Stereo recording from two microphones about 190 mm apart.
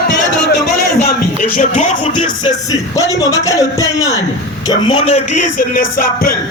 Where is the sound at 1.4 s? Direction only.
40° left (ahead or behind).